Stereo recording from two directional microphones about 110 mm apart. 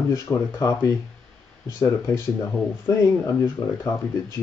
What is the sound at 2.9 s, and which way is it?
Speech, 25° left (ahead or behind).